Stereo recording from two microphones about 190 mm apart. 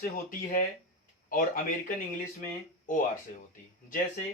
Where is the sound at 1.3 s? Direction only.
45° left (ahead or behind).